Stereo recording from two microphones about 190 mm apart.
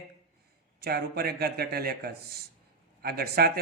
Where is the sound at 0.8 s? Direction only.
55° right (ahead or behind).